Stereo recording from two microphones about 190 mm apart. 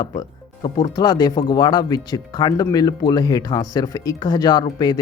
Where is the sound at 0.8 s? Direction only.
20° left (ahead or behind).